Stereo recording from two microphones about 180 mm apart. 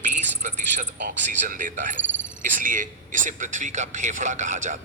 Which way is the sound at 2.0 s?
90° right.